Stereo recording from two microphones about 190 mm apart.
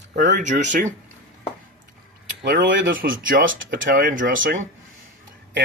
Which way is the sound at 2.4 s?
45° right (ahead or behind).